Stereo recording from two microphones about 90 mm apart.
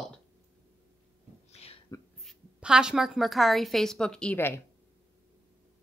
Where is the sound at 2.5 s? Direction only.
10° right (ahead or behind); by 4.3 s 10° left (ahead or behind).